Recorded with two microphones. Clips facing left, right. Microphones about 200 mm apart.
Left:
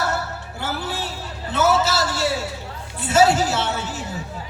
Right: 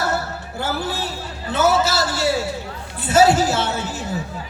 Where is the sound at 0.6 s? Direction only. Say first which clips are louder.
Right 3 dB; 35° right (ahead or behind).